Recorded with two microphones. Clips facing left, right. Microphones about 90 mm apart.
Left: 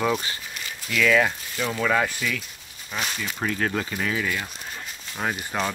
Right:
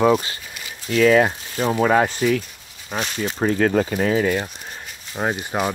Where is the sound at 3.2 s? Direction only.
30° right (ahead or behind).